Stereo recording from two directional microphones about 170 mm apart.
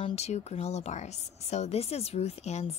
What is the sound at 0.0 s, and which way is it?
Speech, 40° left (ahead or behind).